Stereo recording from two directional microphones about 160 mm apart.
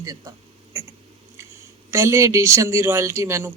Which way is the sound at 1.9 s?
20° right (ahead or behind).